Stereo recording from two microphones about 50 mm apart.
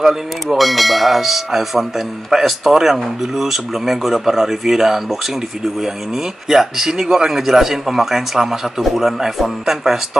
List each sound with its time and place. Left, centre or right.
0.0 s speech: centre